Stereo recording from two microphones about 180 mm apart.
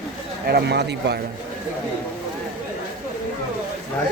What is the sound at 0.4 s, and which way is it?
Speech, 65° right (ahead or behind).